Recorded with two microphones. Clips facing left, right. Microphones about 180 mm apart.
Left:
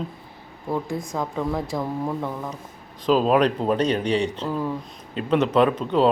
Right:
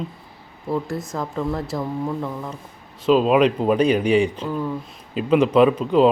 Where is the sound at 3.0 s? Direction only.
Centre (ahead or behind).